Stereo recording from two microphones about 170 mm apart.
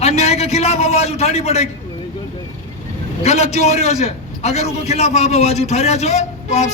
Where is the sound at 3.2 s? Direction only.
40° left (ahead or behind).